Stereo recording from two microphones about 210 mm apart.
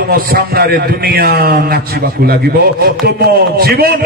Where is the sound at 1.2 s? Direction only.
45° right (ahead or behind).